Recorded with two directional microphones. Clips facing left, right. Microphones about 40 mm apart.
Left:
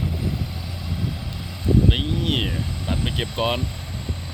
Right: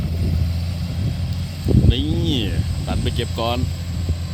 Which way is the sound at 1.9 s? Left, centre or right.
Centre.